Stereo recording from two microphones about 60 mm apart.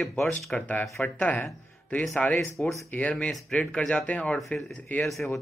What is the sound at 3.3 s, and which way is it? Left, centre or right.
Speech, centre.